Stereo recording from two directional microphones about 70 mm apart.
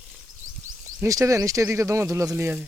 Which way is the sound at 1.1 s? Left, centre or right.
Right.